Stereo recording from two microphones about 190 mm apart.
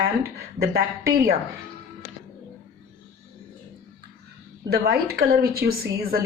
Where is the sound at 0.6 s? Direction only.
55° right (ahead or behind).